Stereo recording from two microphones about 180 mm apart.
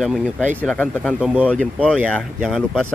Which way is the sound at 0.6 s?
10° left (ahead or behind).